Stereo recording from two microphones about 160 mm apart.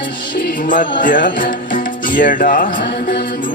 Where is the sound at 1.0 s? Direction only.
60° left (ahead or behind).